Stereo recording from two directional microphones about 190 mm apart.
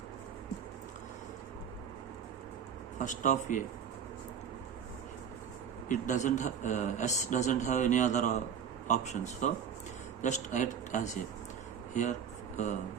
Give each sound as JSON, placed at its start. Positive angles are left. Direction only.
{"t": 3.0, "sound": "a man's voice", "side_deg": 40}
{"t": 5.9, "sound": "a man's voice", "side_deg": 40}